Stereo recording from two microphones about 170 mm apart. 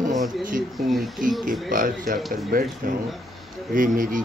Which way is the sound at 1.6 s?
55° right (ahead or behind).